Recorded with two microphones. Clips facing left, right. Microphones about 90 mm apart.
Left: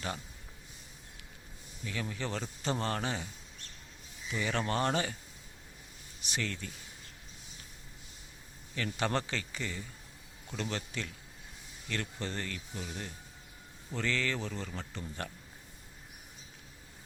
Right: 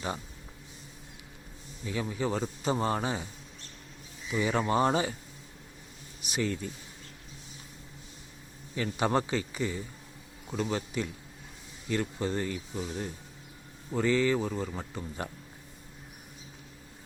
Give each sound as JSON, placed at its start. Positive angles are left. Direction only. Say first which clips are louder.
{"t": 1.8, "sound": "a man's voice", "louder": "right 6 dB", "side_deg": -20}
{"t": 4.3, "sound": "a man's voice", "louder": "right 5 dB", "side_deg": -15}
{"t": 6.2, "sound": "a man's voice", "louder": "right 6 dB", "side_deg": -15}
{"t": 8.7, "sound": "a man's voice", "louder": "right 5 dB", "side_deg": -15}